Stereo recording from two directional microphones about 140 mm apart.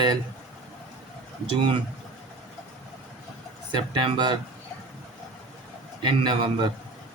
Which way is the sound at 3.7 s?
35° right (ahead or behind).